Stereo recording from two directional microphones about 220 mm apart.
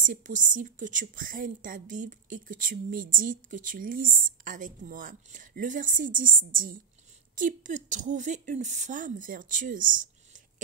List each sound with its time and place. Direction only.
0.0 s a woman's voice: 35° right (ahead or behind)